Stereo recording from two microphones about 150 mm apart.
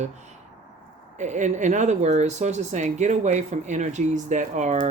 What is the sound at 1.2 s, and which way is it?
Speech, 55° right (ahead or behind).